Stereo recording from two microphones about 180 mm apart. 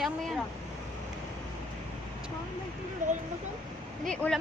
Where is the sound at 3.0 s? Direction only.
45° right (ahead or behind).